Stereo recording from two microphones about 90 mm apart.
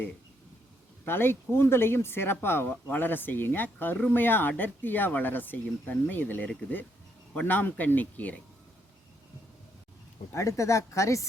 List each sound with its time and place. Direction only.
1.0 s speech: 25° left (ahead or behind)
10.3 s a woman's voice: 35° left (ahead or behind)